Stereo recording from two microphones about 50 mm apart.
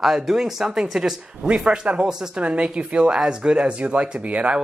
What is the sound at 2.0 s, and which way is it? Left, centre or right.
Speech, centre.